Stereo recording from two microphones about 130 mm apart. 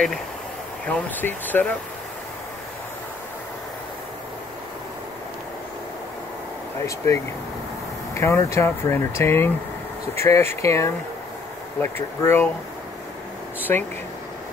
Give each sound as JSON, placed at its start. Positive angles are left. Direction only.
{"t": 0.8, "sound": "speech", "side_deg": 10}
{"t": 8.1, "sound": "speech", "side_deg": 20}
{"t": 13.6, "sound": "speech", "side_deg": 15}